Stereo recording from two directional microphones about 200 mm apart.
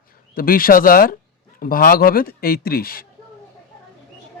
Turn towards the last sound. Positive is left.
turn(degrees=50)  # may be behind; listen again after turning